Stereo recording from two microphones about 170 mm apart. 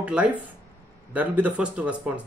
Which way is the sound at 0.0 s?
5° right (ahead or behind).